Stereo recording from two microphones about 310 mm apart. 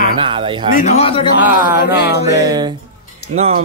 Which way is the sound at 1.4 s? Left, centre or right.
Centre.